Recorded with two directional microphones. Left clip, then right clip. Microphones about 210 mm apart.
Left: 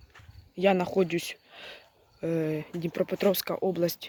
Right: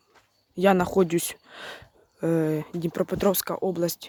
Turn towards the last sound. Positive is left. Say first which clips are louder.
# right 1 dB
turn(degrees=-10)  # may be behind; listen again after turning